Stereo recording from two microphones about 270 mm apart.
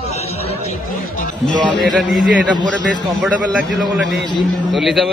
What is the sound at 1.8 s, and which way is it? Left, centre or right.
Speech, centre.